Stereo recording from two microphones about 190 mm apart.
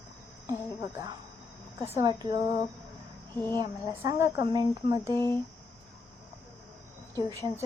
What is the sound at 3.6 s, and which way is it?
Speech, 15° right (ahead or behind).